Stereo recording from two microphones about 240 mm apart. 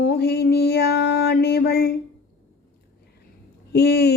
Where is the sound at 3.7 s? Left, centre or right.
Left.